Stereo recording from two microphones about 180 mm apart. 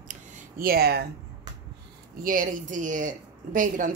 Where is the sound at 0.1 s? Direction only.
55° right (ahead or behind).